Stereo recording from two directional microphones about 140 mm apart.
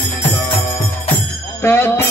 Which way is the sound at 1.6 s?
15° left (ahead or behind).